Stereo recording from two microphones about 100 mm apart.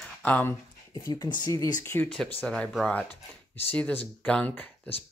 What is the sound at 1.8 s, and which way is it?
Speech, 25° left (ahead or behind).